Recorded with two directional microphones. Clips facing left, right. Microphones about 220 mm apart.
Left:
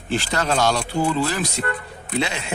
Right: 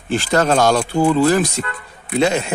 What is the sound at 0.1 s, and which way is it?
Speech, 50° right (ahead or behind).